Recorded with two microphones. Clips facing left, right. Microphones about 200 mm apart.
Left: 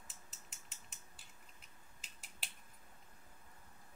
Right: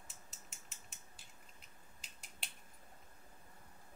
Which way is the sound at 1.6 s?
Centre (ahead or behind).